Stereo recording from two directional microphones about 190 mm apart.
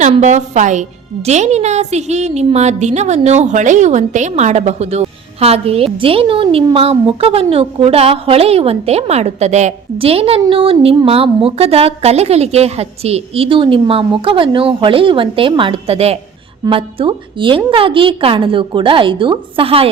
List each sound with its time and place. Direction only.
0.0 s a woman's voice: 40° right (ahead or behind)